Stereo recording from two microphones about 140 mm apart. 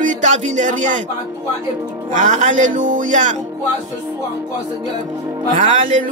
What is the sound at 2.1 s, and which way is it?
Speech, 70° right (ahead or behind).